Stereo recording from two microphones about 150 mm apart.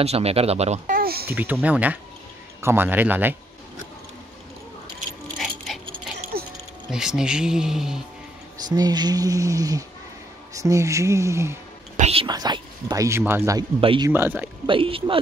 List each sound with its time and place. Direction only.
0.0 s speech: 45° right (ahead or behind)
0.9 s speech: 90° right
1.3 s speech: 10° right (ahead or behind)
5.0 s a sound: 55° right (ahead or behind)
5.7 s a sound: centre (ahead or behind)
6.9 s speech: 5° right (ahead or behind)
8.6 s speech: 25° right (ahead or behind)
12.0 s speech: 40° right (ahead or behind)
12.3 s speech: 30° right (ahead or behind)
13.7 s speech: 35° right (ahead or behind)
14.0 s speech: 15° right (ahead or behind)
14.7 s speech: 35° right (ahead or behind)